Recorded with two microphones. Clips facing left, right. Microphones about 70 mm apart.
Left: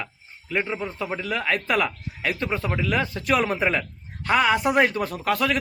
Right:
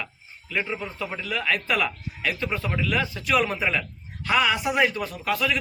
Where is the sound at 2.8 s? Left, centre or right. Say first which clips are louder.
Left 2 dB; left.